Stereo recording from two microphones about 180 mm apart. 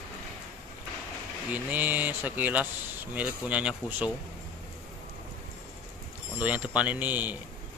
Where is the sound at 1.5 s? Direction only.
10° right (ahead or behind).